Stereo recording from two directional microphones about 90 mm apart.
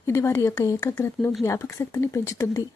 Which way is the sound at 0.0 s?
30° left (ahead or behind).